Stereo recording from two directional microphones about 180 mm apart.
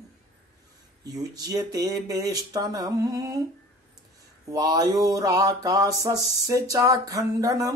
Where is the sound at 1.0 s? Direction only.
20° right (ahead or behind).